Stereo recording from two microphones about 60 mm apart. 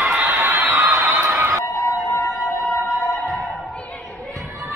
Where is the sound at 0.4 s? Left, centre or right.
Right.